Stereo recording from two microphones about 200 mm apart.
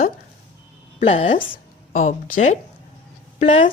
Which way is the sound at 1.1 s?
25° left (ahead or behind).